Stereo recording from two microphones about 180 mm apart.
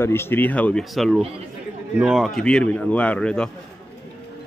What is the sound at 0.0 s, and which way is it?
A man's voice, 15° left (ahead or behind).